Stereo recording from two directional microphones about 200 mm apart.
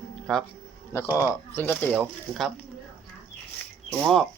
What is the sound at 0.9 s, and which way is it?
Speech, 15° left (ahead or behind).